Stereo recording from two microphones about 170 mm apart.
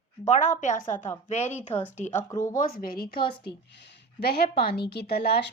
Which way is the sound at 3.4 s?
90° left.